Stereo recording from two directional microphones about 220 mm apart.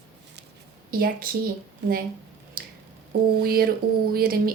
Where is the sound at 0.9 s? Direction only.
40° right (ahead or behind).